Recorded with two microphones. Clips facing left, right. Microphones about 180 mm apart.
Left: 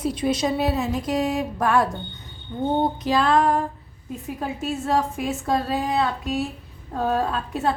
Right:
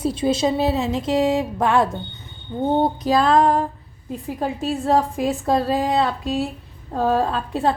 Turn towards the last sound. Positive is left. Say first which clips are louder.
# right 3 dB
turn(degrees=-30)  # may be behind; listen again after turning